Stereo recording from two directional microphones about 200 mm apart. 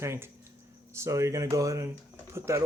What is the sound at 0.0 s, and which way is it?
Speech, 15° right (ahead or behind).